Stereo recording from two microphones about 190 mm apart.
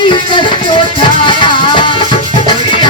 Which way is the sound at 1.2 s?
25° left (ahead or behind).